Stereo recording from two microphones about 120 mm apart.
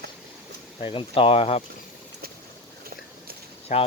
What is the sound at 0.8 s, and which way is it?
Speech, 50° left (ahead or behind).